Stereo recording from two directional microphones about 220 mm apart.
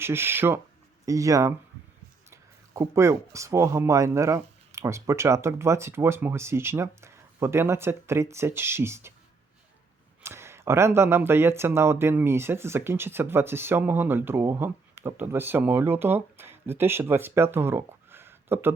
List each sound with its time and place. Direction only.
0.0 s speech: 10° right (ahead or behind)
10.2 s speech: 10° right (ahead or behind)